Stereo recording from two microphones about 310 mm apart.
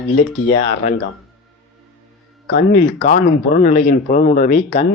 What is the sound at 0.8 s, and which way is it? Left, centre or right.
Speech, left.